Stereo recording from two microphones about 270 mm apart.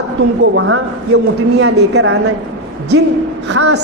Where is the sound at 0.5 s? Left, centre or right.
Right.